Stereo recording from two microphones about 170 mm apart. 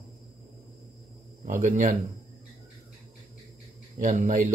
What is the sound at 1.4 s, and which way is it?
Speech, 50° right (ahead or behind).